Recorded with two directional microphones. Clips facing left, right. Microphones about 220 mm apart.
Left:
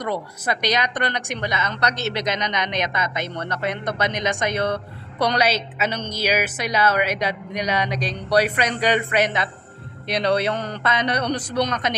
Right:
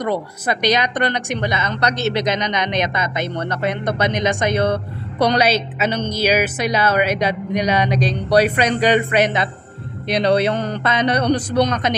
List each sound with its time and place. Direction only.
0.0 s a woman's voice: 25° right (ahead or behind)